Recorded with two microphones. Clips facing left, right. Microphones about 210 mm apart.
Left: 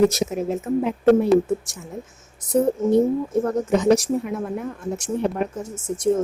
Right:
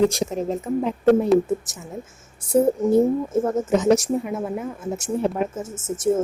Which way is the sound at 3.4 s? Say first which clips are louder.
Left 1 dB; 5° right (ahead or behind).